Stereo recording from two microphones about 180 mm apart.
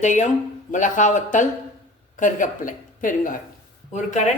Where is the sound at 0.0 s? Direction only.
40° left (ahead or behind).